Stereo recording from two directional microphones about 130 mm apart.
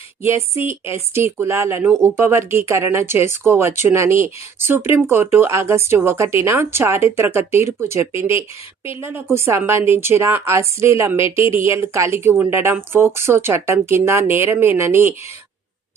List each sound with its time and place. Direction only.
0.2 s speech: 20° right (ahead or behind)